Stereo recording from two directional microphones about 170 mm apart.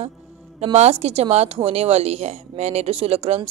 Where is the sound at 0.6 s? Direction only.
35° right (ahead or behind).